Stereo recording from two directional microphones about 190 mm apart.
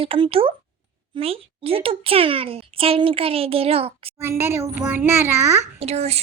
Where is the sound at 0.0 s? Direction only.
30° right (ahead or behind).